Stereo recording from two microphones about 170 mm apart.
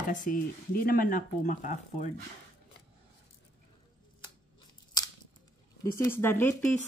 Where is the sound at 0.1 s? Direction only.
50° left (ahead or behind).